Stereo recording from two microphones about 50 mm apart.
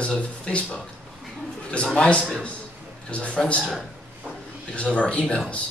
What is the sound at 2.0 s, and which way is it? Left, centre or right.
A man's voice, left.